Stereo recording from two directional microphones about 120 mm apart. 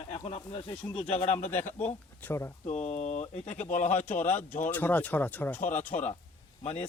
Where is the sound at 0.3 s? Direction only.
50° left (ahead or behind); by 1.5 s 65° left (ahead or behind).